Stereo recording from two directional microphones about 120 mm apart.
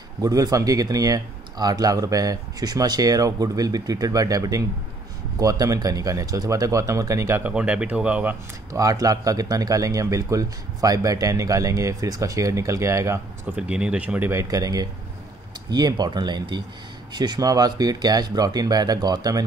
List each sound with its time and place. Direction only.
0.2 s speech: 30° right (ahead or behind); by 8.4 s 10° right (ahead or behind)
8.7 s speech: 30° right (ahead or behind)
13.6 s speech: 10° right (ahead or behind)
14.3 s speech: 30° right (ahead or behind)